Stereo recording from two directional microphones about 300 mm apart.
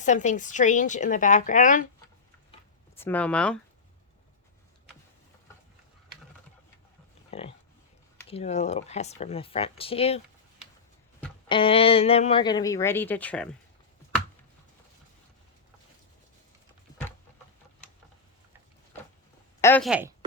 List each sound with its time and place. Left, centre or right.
0.0 s speech: left
3.0 s speech: centre
7.3 s a sound: centre
8.3 s speech: left
11.4 s speech: centre
19.6 s speech: centre